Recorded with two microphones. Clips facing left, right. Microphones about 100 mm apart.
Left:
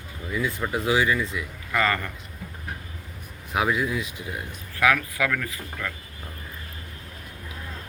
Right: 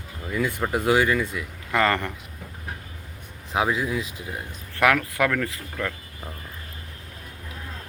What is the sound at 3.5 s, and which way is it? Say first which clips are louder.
Speech: even; 30° right (ahead or behind).